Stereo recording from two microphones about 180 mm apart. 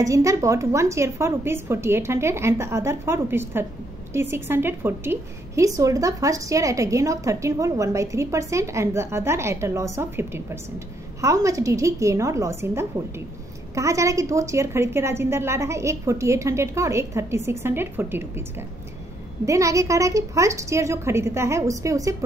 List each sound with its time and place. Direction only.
0.0 s a woman's voice: 15° right (ahead or behind)
19.4 s a woman's voice: 15° right (ahead or behind)